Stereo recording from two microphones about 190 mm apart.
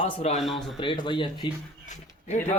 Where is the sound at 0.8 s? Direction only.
25° left (ahead or behind).